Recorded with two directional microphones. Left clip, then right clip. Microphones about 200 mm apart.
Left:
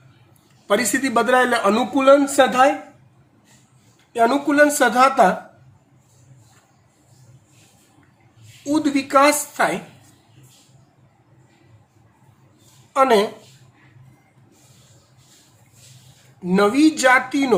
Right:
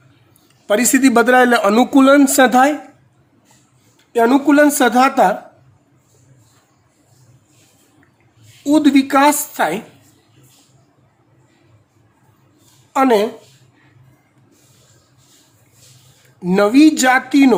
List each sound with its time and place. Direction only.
0.7 s speech: 55° right (ahead or behind)
4.1 s a woman's voice: 50° right (ahead or behind)
8.6 s a woman's voice: 50° right (ahead or behind)
12.9 s a woman's voice: 50° right (ahead or behind)
16.4 s a woman's voice: 50° right (ahead or behind)